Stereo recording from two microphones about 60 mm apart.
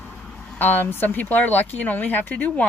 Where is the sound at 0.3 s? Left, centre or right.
Centre.